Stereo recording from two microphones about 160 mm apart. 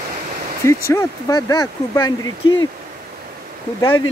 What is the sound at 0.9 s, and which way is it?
Speech, 20° left (ahead or behind).